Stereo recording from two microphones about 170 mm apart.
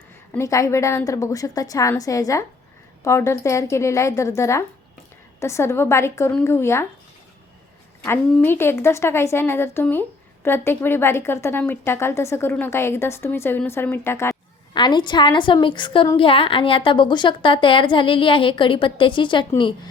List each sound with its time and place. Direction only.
0.3 s a woman's voice: 20° left (ahead or behind)
8.0 s a woman's voice: 15° left (ahead or behind)
14.7 s a woman's voice: 25° left (ahead or behind)